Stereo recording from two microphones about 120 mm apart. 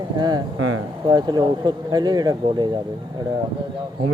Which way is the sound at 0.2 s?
35° right (ahead or behind).